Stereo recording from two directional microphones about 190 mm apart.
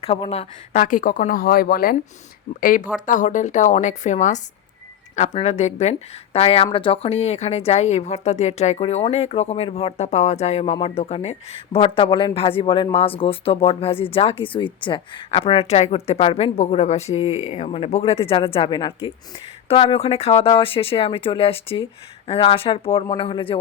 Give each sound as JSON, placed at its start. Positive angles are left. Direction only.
{"t": 0.0, "sound": "speech", "side_deg": 30}